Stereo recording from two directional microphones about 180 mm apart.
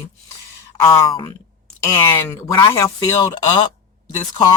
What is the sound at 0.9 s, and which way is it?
Speech, 25° left (ahead or behind).